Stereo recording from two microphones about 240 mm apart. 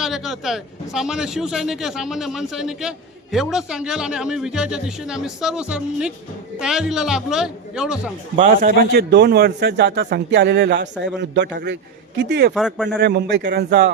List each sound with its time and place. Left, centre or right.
0.0 s speech: centre
8.4 s a man's voice: right
12.5 s speech: centre
12.9 s a man's voice: right